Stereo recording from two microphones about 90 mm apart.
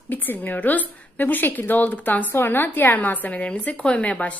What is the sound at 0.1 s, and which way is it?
A woman's voice, 20° left (ahead or behind).